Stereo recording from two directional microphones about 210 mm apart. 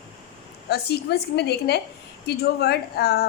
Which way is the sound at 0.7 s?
50° left (ahead or behind).